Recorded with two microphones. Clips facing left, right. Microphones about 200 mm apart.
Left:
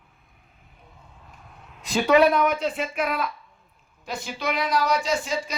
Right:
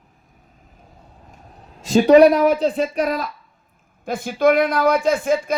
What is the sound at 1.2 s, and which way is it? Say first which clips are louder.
Speech: right 4 dB; 40° right (ahead or behind).